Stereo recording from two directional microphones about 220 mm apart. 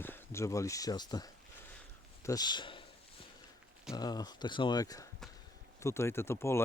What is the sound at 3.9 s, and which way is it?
Speech, 20° left (ahead or behind).